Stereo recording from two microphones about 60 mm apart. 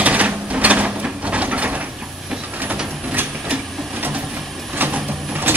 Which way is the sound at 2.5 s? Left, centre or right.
Right.